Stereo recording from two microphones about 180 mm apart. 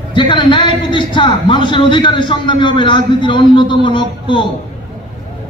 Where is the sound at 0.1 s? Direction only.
25° left (ahead or behind).